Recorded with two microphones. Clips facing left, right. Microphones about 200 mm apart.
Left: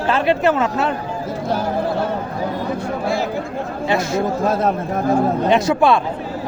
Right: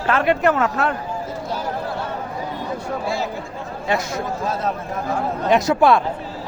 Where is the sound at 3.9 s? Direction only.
25° left (ahead or behind).